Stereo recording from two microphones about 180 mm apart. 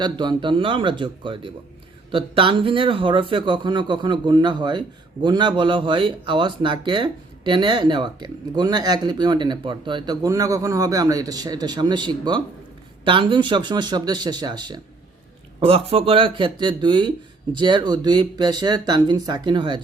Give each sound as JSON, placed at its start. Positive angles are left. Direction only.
{"t": 0.0, "sound": "speech", "side_deg": -25}